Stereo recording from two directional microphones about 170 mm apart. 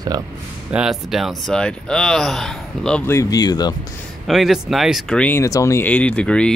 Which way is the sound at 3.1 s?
20° left (ahead or behind).